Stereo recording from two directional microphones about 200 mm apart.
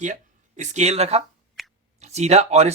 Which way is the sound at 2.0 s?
35° right (ahead or behind).